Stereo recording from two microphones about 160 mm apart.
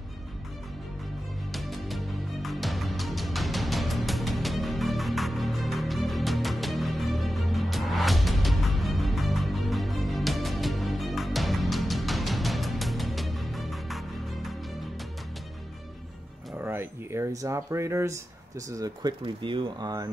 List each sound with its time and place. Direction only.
1.5 s music: centre (ahead or behind)
16.6 s a sound: 15° right (ahead or behind)
18.7 s speech: 20° right (ahead or behind)
19.2 s speech: 30° right (ahead or behind)